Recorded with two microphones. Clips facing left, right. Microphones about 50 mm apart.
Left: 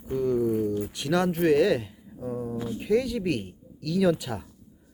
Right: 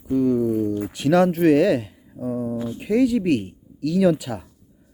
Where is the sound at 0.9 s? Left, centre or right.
Centre.